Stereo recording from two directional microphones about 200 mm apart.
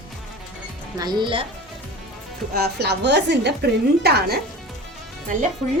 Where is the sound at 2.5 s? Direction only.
55° right (ahead or behind).